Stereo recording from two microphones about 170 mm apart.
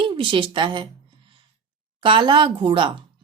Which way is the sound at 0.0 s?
30° right (ahead or behind).